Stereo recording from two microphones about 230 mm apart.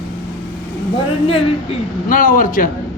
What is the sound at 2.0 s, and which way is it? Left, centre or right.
Speech, left.